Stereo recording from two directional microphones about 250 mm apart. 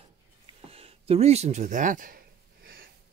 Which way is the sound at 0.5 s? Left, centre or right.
Right.